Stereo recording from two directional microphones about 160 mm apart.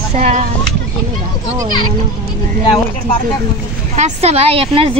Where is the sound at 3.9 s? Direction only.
45° right (ahead or behind).